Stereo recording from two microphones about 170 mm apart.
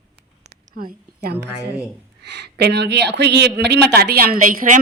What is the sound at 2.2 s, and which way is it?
A woman's voice, 90° right.